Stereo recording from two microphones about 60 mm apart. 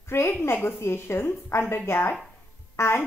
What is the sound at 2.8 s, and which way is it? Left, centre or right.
Speech, left.